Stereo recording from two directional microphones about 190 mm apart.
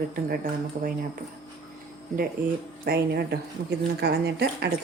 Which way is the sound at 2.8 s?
55° right (ahead or behind).